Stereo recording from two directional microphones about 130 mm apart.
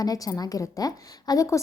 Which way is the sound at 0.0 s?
30° left (ahead or behind).